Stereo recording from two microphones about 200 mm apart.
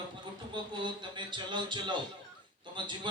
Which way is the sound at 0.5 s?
25° right (ahead or behind).